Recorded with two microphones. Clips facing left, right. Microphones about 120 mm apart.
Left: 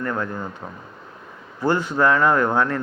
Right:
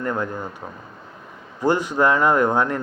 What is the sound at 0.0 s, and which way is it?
Speech, 20° right (ahead or behind).